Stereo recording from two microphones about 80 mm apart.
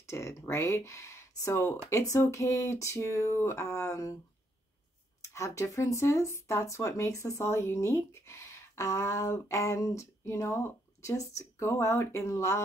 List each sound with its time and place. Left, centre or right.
0.0 s speech: left
5.3 s speech: left